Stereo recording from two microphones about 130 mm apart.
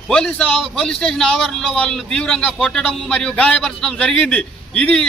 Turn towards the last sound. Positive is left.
turn(degrees=5)  # may be behind; listen again after turning